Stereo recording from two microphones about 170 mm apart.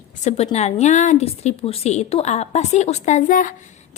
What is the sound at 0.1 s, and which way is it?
A woman's voice, 45° left (ahead or behind).